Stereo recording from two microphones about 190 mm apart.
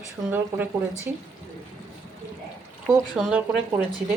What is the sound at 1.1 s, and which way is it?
Speech, 10° right (ahead or behind).